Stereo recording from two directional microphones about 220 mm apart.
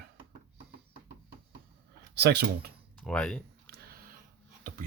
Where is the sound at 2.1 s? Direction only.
50° right (ahead or behind).